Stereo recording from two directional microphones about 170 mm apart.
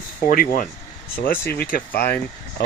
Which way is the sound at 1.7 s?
65° left (ahead or behind).